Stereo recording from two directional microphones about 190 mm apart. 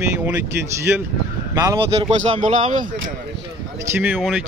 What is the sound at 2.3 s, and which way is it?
Speech, 40° right (ahead or behind).